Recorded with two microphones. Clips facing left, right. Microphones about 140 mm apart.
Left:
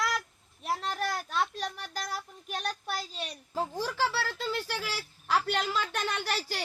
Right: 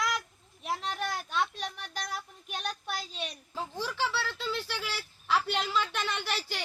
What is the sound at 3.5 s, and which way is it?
Speech, 40° left (ahead or behind).